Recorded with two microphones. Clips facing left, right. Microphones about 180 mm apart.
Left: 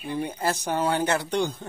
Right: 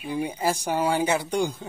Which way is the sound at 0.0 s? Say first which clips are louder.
Right 1 dB; 10° right (ahead or behind).